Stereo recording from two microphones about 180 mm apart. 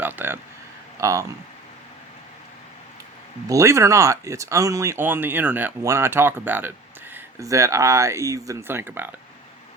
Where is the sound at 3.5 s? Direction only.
15° right (ahead or behind).